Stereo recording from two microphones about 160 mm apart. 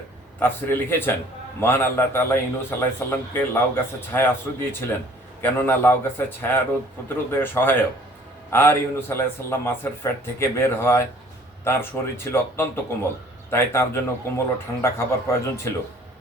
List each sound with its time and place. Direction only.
0.3 s a man's voice: 15° left (ahead or behind)